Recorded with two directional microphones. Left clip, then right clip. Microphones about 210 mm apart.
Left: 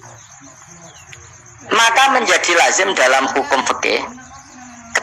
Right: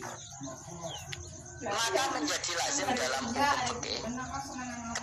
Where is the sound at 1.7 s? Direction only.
45° left (ahead or behind).